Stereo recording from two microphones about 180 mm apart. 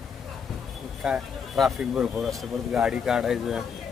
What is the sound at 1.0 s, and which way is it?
Speech, centre (ahead or behind).